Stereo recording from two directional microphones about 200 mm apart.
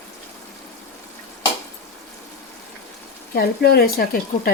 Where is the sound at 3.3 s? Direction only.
50° left (ahead or behind).